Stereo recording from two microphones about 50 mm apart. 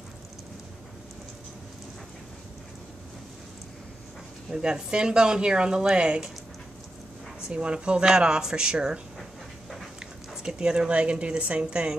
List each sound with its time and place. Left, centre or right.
4.5 s speech: centre
7.4 s speech: centre